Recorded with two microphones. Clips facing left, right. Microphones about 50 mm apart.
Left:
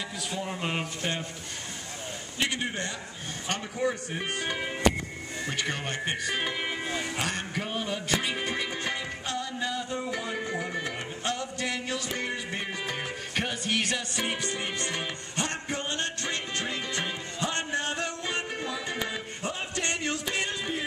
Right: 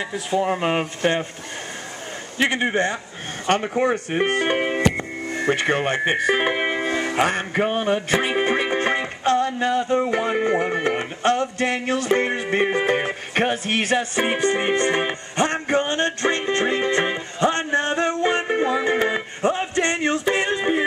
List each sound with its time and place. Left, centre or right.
0.1 s speech: right
2.4 s speech: right
3.4 s music: right